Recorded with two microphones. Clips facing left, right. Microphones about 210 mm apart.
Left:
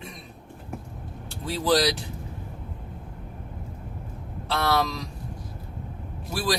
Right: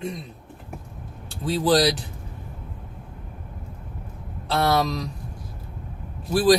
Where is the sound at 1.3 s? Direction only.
20° right (ahead or behind).